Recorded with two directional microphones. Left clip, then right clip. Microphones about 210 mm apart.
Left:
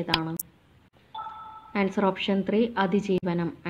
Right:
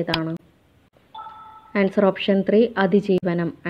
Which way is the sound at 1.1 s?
Centre (ahead or behind).